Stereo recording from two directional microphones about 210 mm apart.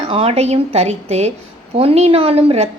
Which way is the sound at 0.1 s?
30° right (ahead or behind).